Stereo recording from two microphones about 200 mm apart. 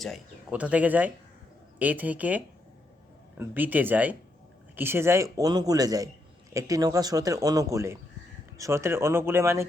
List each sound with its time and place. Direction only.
0.0 s a man's voice: centre (ahead or behind)